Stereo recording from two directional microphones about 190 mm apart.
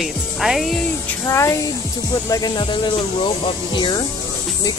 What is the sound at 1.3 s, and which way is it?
Speech, 15° left (ahead or behind).